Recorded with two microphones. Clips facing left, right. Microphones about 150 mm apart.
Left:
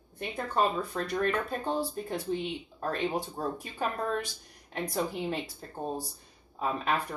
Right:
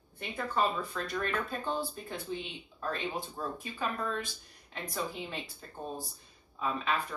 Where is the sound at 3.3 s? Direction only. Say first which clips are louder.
Left 4 dB; 40° left (ahead or behind).